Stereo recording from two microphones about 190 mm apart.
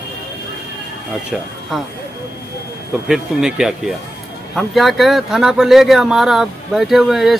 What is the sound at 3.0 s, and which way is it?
Speech, 5° right (ahead or behind).